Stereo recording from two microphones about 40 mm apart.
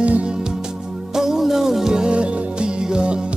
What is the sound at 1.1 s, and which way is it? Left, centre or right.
Music, centre.